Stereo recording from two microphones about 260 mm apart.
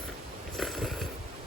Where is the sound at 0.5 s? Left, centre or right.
Centre.